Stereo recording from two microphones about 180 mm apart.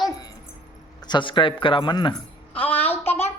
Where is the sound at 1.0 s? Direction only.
25° left (ahead or behind).